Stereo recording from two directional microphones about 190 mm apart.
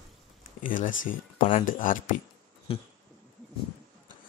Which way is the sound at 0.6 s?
45° left (ahead or behind).